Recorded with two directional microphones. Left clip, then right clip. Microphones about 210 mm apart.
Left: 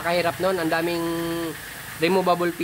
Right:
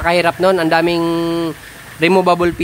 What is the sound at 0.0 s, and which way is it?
Speech, 35° right (ahead or behind).